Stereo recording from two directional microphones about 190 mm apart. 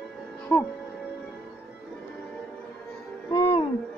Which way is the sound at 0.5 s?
10° left (ahead or behind).